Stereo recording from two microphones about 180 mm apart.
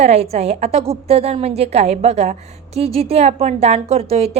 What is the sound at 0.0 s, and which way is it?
A woman's voice, 35° right (ahead or behind).